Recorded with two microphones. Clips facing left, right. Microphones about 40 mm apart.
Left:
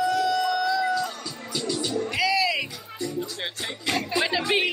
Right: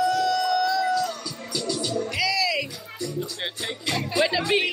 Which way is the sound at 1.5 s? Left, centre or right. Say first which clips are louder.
Even; left.